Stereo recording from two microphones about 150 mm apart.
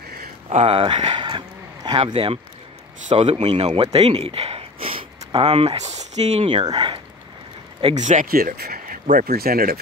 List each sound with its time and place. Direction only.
0.5 s speech: 45° right (ahead or behind)
3.2 s speech: 45° right (ahead or behind)
7.8 s speech: 50° right (ahead or behind); by 9.8 s 85° right